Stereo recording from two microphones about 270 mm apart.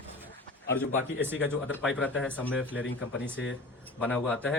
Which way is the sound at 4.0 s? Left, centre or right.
Centre.